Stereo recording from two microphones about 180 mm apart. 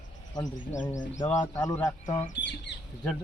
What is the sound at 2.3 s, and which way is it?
Speech, 75° left (ahead or behind).